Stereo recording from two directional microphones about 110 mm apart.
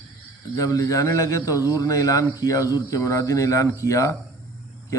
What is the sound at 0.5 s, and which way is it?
A man's voice, 30° left (ahead or behind).